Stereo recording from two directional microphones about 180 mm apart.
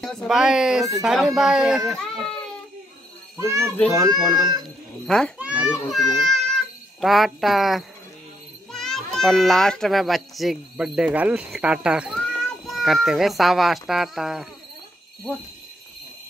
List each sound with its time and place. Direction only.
0.0 s speech: centre (ahead or behind)
3.3 s a child's voice: 15° right (ahead or behind)
5.0 s speech: 5° left (ahead or behind)
5.4 s a child's voice: 5° right (ahead or behind)